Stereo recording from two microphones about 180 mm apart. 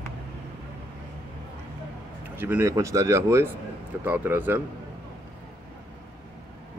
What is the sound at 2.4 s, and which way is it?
Speech, 10° right (ahead or behind).